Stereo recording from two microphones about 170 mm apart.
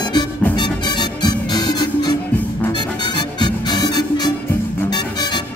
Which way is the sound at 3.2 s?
25° left (ahead or behind).